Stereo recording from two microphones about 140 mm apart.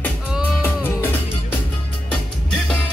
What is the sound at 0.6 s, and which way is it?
Music, 15° left (ahead or behind).